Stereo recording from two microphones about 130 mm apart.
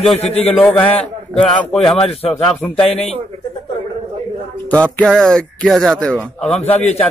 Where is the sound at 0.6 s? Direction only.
15° left (ahead or behind).